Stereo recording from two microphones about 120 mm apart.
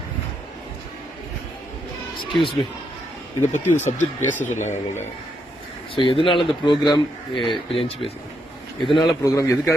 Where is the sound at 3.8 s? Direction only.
90° left.